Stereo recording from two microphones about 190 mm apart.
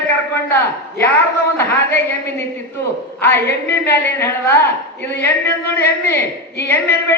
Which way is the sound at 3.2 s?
10° left (ahead or behind).